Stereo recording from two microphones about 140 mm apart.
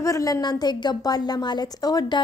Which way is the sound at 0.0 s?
25° left (ahead or behind).